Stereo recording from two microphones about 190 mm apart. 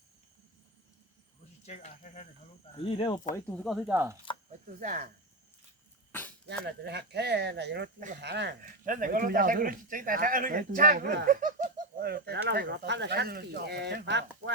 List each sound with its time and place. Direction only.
1.6 s speech: 35° left (ahead or behind)
3.3 s speech: 10° left (ahead or behind)
3.9 s speech: 10° right (ahead or behind)
4.8 s speech: 45° right (ahead or behind)
6.1 s a sound: 10° left (ahead or behind)
6.7 s speech: 60° right (ahead or behind)
8.8 s speech: 45° right (ahead or behind); by 14.5 s 65° right (ahead or behind)